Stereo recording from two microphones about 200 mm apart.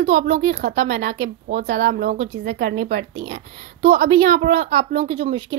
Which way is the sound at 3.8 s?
40° right (ahead or behind).